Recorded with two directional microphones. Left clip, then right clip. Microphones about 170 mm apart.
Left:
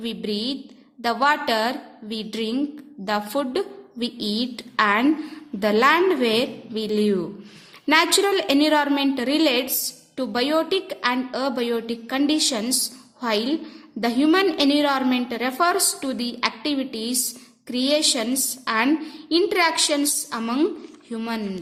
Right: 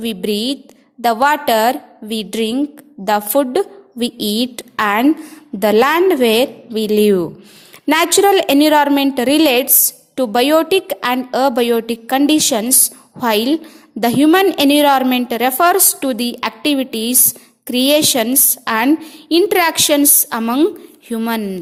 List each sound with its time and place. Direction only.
0.0 s a woman's voice: 45° right (ahead or behind)